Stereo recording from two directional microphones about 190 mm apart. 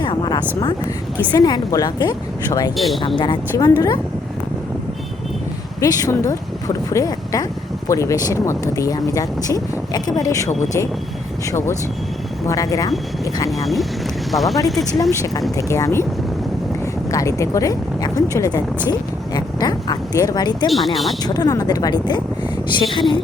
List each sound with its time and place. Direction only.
0.0 s speech: 20° left (ahead or behind)
2.7 s speech: centre (ahead or behind)
3.2 s speech: 20° left (ahead or behind)
5.8 s speech: 20° left (ahead or behind)
11.5 s speech: 15° left (ahead or behind)
13.5 s speech: centre (ahead or behind)
15.1 s speech: 15° left (ahead or behind)
17.1 s speech: 15° left (ahead or behind)
20.7 s speech: centre (ahead or behind)
21.2 s speech: 20° left (ahead or behind)